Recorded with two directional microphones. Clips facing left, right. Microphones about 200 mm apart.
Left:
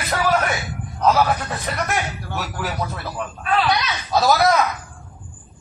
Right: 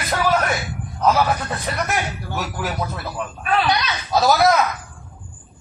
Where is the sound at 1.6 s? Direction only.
Centre (ahead or behind).